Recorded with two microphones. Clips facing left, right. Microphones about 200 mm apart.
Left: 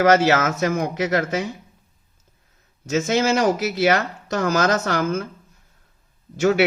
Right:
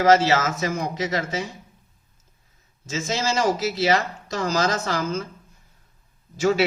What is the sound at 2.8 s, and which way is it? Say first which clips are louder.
Speech: left 6 dB; 60° left (ahead or behind).